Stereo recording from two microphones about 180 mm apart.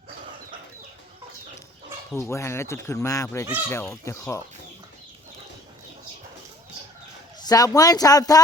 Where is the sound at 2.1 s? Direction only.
15° left (ahead or behind).